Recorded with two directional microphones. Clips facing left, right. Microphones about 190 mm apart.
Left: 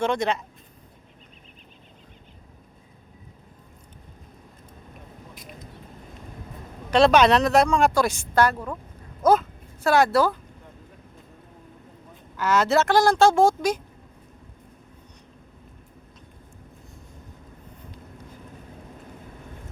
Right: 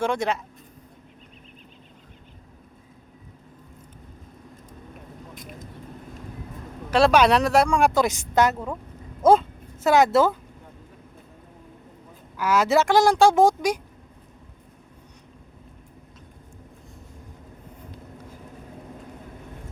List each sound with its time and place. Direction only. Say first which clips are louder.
0.0 s speech: left 1 dB; 5° right (ahead or behind)
6.9 s speech: left 1 dB; 10° right (ahead or behind)
12.4 s speech: right 1 dB; 10° right (ahead or behind)